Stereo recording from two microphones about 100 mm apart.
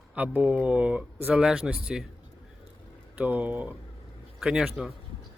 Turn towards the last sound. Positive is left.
turn(degrees=-5)  # may be behind; listen again after turning